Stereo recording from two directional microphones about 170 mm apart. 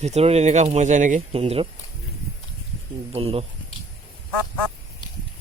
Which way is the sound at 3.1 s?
35° right (ahead or behind).